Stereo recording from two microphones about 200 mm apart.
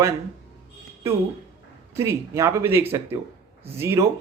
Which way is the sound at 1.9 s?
15° right (ahead or behind).